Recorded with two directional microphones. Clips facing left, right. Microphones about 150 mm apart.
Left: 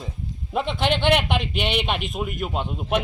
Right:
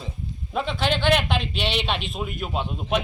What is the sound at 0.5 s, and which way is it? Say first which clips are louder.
A man's voice: left 2 dB; 20° left (ahead or behind).